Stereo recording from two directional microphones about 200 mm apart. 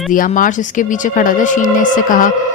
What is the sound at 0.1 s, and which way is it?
A woman's voice, 40° left (ahead or behind).